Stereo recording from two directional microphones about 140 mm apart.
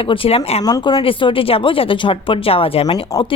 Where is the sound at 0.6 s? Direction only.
30° left (ahead or behind).